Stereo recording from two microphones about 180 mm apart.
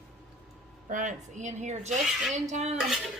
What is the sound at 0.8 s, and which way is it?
Speech, 45° right (ahead or behind).